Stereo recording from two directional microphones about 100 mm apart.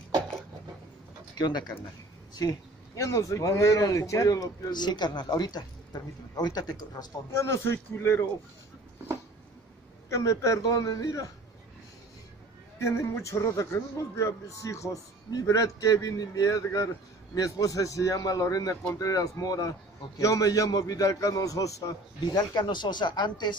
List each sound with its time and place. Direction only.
1.4 s speech: 45° left (ahead or behind)
3.0 s speech: 30° left (ahead or behind)
7.2 s a man's voice: 25° left (ahead or behind)
10.0 s speech: 30° left (ahead or behind)
12.7 s speech: 30° left (ahead or behind); by 23.5 s 45° left (ahead or behind)